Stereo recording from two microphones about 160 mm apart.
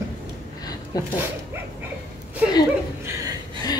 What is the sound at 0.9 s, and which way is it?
Speech, 25° left (ahead or behind).